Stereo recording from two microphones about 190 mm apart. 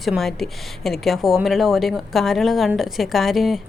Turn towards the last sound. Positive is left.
turn(degrees=0)  # may be behind; listen again after turning